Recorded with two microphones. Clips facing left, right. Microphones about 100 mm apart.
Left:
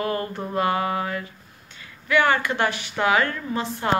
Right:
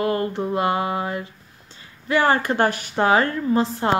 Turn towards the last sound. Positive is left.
turn(degrees=-35)  # may be behind; listen again after turning